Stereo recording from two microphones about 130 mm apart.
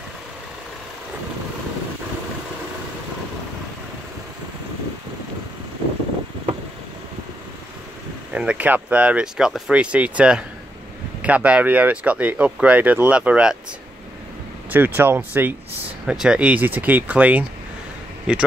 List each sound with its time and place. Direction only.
8.3 s speech: 10° right (ahead or behind)
14.7 s speech: 15° right (ahead or behind)